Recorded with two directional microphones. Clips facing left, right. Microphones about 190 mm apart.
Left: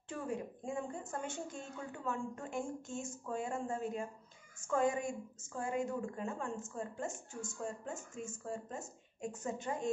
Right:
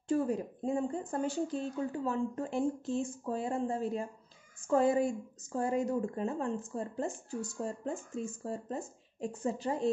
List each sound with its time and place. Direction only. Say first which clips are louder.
0.1 s speech: right 9 dB; 35° right (ahead or behind)